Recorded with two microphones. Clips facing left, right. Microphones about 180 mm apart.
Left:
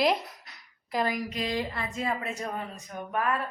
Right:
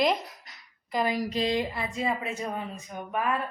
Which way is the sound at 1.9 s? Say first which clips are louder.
Right 1 dB; centre (ahead or behind).